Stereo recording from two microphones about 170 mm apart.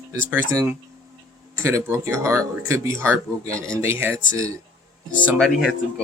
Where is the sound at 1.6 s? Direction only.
15° right (ahead or behind).